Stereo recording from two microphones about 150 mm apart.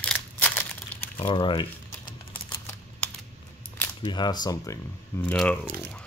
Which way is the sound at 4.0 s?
30° left (ahead or behind).